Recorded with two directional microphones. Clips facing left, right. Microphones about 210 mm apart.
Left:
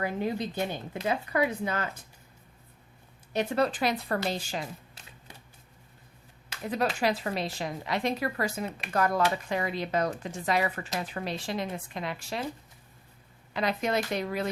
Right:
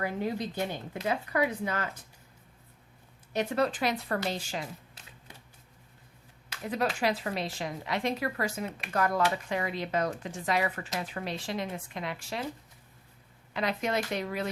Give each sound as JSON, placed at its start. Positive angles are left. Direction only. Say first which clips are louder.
{"t": 0.0, "sound": "speech", "louder": "left 1 dB", "side_deg": 20}
{"t": 3.3, "sound": "speech", "louder": "left 1 dB", "side_deg": 30}
{"t": 6.5, "sound": "speech", "louder": "left 1 dB", "side_deg": 30}
{"t": 13.5, "sound": "speech", "louder": "left 2 dB", "side_deg": 40}